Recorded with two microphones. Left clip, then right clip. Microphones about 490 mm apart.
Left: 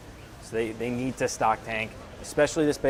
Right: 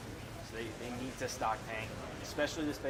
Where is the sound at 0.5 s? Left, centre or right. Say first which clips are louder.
Left 14 dB; left.